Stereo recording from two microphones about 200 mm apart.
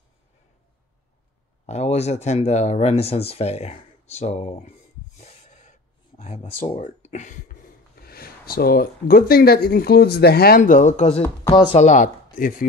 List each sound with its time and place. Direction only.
1.7 s speech: 35° left (ahead or behind)
5.2 s a sound: 35° left (ahead or behind)
6.6 s speech: 35° left (ahead or behind)
11.8 s speech: 40° left (ahead or behind)